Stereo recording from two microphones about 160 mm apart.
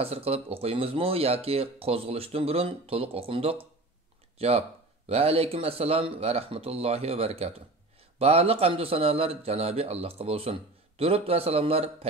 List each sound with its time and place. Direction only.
0.0 s a man's voice: 40° right (ahead or behind)